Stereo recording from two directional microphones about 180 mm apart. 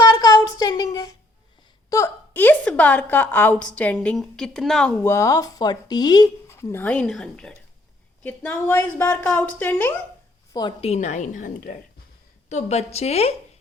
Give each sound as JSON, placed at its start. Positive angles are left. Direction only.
{"t": 0.0, "sound": "a sound", "side_deg": 20}
{"t": 1.9, "sound": "a woman's voice", "side_deg": 15}
{"t": 5.0, "sound": "speech", "side_deg": 15}
{"t": 10.5, "sound": "a woman's voice", "side_deg": 25}
{"t": 12.5, "sound": "a woman's voice", "side_deg": 40}